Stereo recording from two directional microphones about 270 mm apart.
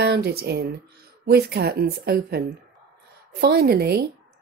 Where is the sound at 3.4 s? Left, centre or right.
Right.